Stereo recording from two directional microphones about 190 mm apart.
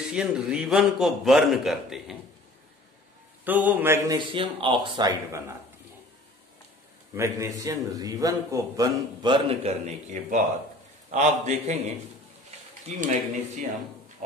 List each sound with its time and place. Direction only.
0.0 s a man's voice: 5° right (ahead or behind)
3.4 s mantra: 10° right (ahead or behind)
4.3 s a man's voice: 25° right (ahead or behind)
7.2 s a man's voice: 15° right (ahead or behind); by 11.8 s 40° right (ahead or behind)
12.4 s a sound: 35° right (ahead or behind)